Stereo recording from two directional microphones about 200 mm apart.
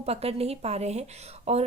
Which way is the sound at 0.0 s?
30° right (ahead or behind).